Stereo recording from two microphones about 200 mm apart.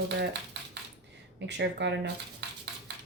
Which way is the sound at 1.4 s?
60° right (ahead or behind).